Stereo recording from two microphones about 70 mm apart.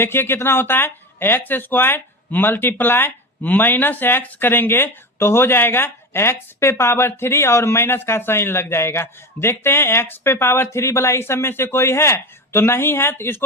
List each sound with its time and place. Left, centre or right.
0.0 s speech: left